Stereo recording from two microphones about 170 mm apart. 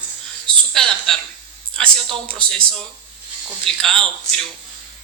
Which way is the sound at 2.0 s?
30° right (ahead or behind).